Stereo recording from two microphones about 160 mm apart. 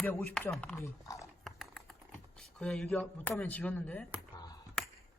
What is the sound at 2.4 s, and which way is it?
Speech, 5° left (ahead or behind).